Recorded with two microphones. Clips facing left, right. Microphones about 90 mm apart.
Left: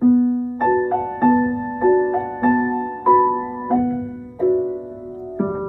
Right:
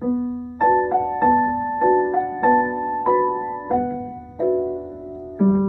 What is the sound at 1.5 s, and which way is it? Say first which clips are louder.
Music: left 1 dB; 10° right (ahead or behind).